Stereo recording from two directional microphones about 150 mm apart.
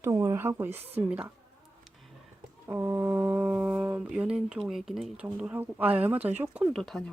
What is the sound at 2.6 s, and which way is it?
Speech, 20° right (ahead or behind).